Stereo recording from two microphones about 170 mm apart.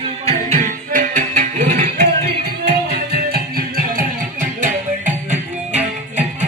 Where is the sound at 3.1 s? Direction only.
60° right (ahead or behind).